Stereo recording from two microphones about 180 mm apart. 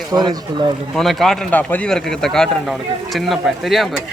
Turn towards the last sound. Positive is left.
turn(degrees=0)  # may be behind; listen again after turning